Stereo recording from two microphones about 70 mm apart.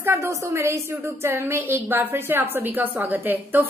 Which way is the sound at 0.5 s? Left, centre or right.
Right.